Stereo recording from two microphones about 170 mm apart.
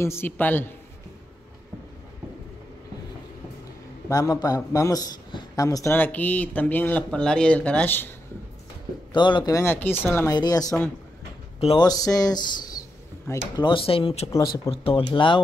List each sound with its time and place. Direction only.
0.0 s a man's voice: 15° left (ahead or behind)
4.1 s a man's voice: 20° left (ahead or behind)
9.1 s a man's voice: 25° left (ahead or behind)
13.6 s speech: 30° left (ahead or behind)